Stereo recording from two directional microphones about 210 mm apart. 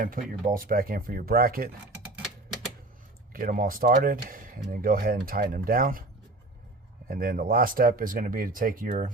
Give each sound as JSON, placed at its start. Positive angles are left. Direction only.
{"t": 0.0, "sound": "speech", "side_deg": -40}
{"t": 3.3, "sound": "speech", "side_deg": -40}
{"t": 7.1, "sound": "speech", "side_deg": -40}